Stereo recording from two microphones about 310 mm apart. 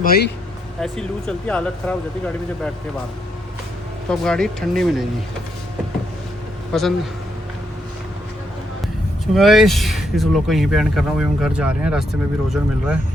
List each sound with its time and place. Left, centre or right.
0.0 s speech: left
0.8 s speech: centre
4.1 s speech: centre
6.7 s speech: centre
9.3 s speech: centre